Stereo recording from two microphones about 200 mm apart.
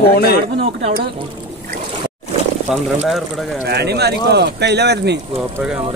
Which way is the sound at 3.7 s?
55° right (ahead or behind).